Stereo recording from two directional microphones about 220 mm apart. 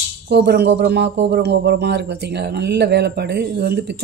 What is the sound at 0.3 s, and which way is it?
Cutlery, 50° right (ahead or behind).